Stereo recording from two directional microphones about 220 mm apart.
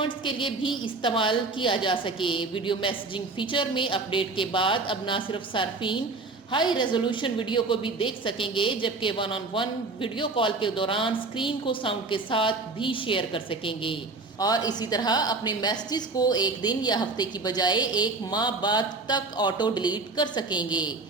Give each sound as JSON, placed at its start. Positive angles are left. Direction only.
{"t": 0.3, "sound": "a woman's voice", "side_deg": 20}